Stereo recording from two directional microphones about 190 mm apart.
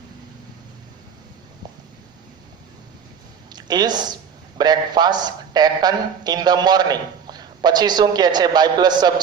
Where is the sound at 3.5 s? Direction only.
20° right (ahead or behind).